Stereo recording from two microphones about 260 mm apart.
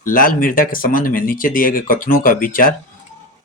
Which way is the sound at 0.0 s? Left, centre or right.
Left.